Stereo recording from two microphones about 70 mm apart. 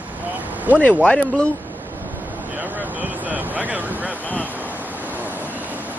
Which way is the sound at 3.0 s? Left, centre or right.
Right.